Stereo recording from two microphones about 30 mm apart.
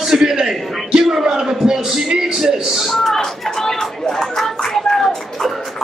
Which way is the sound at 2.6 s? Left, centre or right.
Centre.